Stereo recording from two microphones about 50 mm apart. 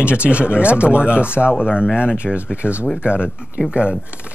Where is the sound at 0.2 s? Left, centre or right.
Right.